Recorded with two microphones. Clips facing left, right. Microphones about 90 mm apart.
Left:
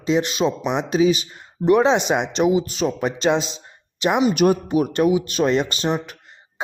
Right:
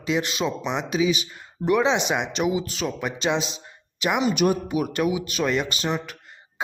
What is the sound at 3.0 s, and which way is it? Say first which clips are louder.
Speech: left 4 dB; 40° left (ahead or behind).